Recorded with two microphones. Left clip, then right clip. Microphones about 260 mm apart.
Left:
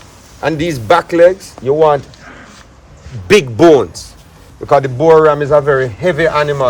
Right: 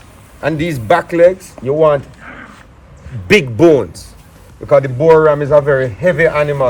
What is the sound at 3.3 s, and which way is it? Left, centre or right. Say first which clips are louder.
Speech: left 2 dB; centre.